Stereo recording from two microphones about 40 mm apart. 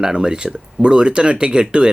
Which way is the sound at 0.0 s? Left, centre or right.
Centre.